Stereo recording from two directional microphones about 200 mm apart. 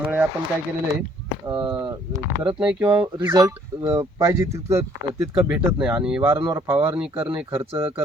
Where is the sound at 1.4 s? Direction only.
25° right (ahead or behind).